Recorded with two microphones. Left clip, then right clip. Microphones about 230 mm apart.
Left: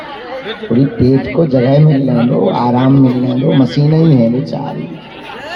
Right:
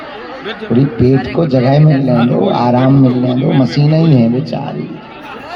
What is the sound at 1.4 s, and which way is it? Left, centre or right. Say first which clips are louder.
Speech: left 1 dB; right.